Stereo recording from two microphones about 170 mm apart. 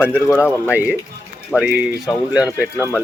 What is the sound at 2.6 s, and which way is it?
Speech, 15° left (ahead or behind).